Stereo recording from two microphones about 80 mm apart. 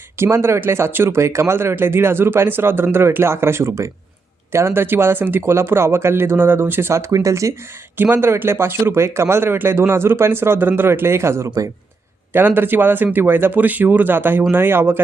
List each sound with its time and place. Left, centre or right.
0.2 s speech: right
8.1 s speech: right
12.3 s speech: right